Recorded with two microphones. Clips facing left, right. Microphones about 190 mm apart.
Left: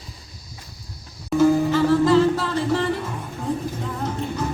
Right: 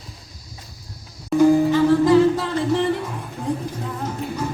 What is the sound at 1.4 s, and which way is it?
Music, 15° right (ahead or behind).